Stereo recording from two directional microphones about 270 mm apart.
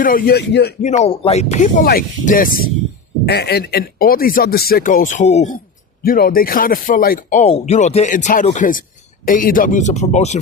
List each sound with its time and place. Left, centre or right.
0.0 s speech: left